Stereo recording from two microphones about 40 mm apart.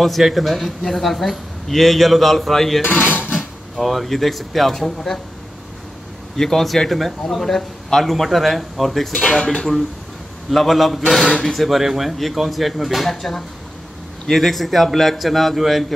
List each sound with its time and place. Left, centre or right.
0.0 s a man's voice: centre
2.8 s speech: left
3.3 s speech: centre
6.3 s a man's voice: centre
9.4 s speech: left
10.5 s a man's voice: centre
11.2 s a man's voice: centre
11.5 s a man's voice: centre